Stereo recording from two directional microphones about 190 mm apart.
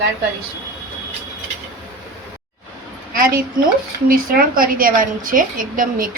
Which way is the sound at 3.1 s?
50° right (ahead or behind).